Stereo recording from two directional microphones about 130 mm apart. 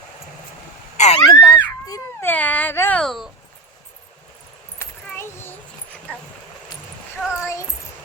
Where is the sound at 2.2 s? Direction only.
10° left (ahead or behind).